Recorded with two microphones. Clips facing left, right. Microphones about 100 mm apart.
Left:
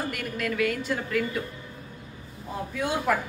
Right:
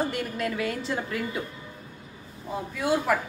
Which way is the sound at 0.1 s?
25° right (ahead or behind).